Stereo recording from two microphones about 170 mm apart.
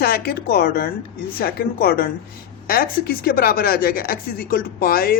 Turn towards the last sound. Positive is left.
turn(degrees=60)  # may be behind; listen again after turning